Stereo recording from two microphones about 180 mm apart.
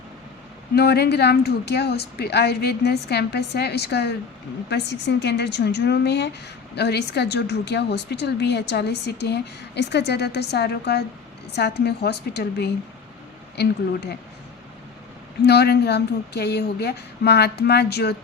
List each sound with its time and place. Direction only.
0.8 s a woman's voice: 65° left (ahead or behind)
15.4 s a woman's voice: 65° left (ahead or behind)